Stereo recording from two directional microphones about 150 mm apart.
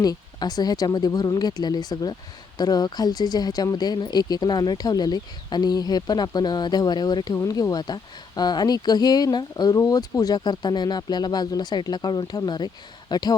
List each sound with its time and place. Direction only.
0.0 s speech: 25° left (ahead or behind)